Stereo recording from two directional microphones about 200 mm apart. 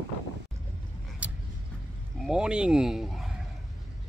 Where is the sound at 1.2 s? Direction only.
5° right (ahead or behind).